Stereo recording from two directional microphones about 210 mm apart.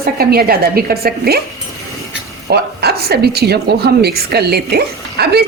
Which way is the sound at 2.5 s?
50° right (ahead or behind).